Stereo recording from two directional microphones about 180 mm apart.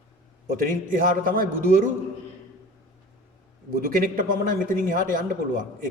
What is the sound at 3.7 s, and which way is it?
A man's voice, 50° right (ahead or behind).